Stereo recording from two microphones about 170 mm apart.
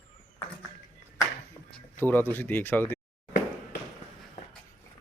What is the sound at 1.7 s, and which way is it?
Speech, 10° left (ahead or behind).